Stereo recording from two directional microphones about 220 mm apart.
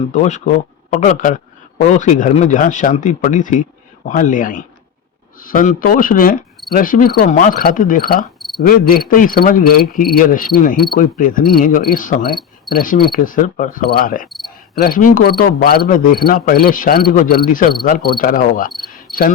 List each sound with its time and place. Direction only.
0.1 s speech: 30° left (ahead or behind)
8.4 s cricket: centre (ahead or behind)
8.6 s speech: 40° left (ahead or behind)
12.3 s cricket: centre (ahead or behind)
12.7 s speech: 40° left (ahead or behind)
14.3 s cricket: centre (ahead or behind)
14.8 s speech: 40° left (ahead or behind)
19.1 s cricket: centre (ahead or behind)